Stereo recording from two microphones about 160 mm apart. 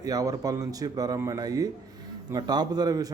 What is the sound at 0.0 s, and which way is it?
A man's voice, 20° right (ahead or behind).